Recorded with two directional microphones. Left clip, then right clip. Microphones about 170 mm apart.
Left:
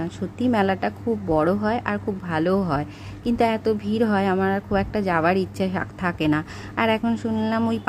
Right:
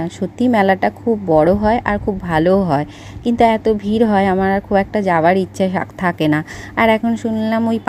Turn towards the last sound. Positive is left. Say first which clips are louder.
# right 6 dB
turn(degrees=-20)  # may be behind; listen again after turning